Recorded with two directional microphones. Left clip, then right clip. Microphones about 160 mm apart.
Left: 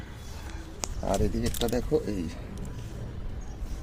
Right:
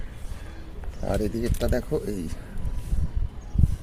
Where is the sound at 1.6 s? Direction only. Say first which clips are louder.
Left 1 dB; 45° right (ahead or behind).